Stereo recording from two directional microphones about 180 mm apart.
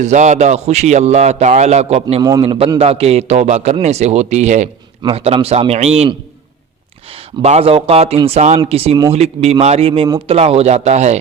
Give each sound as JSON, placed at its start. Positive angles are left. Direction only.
{"t": 0.0, "sound": "a man's voice", "side_deg": -40}
{"t": 7.4, "sound": "a man's voice", "side_deg": -35}